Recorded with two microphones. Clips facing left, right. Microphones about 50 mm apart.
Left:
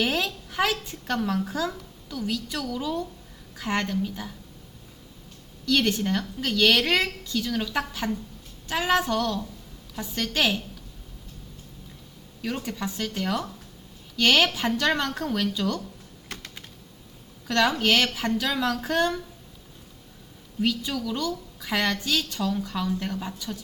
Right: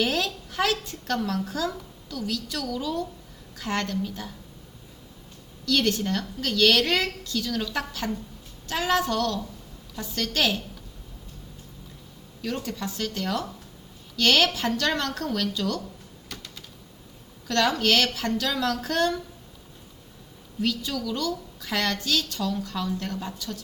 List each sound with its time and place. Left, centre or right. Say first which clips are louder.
0.0 s a woman's voice: even; centre
5.6 s a woman's voice: left 1 dB; centre
12.4 s a woman's voice: even; centre
16.3 s typing: left 2 dB; left
17.5 s a woman's voice: left 1 dB; centre
20.6 s a woman's voice: left 1 dB; centre